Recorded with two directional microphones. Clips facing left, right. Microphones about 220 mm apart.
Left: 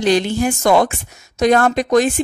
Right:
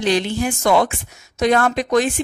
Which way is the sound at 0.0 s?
45° left (ahead or behind).